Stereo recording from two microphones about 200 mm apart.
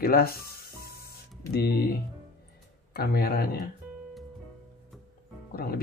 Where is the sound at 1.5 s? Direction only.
50° left (ahead or behind).